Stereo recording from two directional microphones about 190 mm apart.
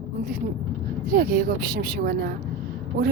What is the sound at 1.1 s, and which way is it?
A woman's voice, 50° right (ahead or behind).